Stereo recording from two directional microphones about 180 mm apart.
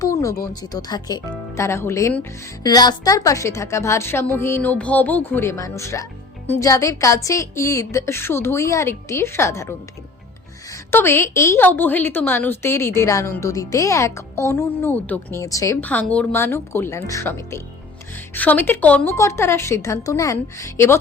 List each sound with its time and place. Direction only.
0.0 s a woman's voice: 15° left (ahead or behind)